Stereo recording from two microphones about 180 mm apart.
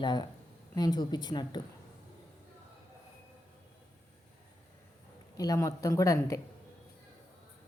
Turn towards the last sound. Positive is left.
turn(degrees=15)  # may be behind; listen again after turning